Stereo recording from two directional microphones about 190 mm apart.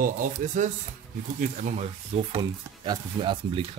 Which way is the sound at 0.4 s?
45° right (ahead or behind).